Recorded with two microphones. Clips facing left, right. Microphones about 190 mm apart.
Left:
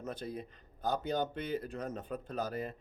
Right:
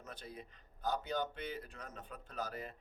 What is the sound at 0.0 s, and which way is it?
A man's voice, 40° left (ahead or behind).